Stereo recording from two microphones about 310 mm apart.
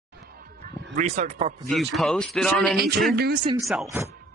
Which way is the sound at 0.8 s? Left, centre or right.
Right.